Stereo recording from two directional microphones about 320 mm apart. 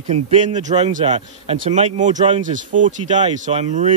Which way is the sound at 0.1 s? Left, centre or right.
Centre.